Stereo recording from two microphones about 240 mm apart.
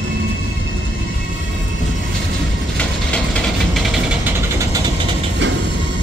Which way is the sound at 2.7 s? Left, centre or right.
Centre.